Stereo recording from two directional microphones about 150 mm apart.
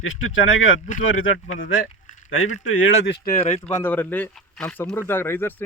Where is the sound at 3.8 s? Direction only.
10° left (ahead or behind).